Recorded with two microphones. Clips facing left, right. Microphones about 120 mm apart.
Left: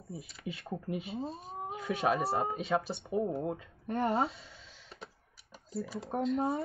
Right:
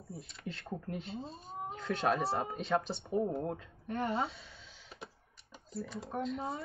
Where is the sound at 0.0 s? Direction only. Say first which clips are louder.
Left 2 dB; centre (ahead or behind).